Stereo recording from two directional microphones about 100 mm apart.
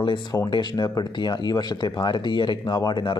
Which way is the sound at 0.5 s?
50° left (ahead or behind).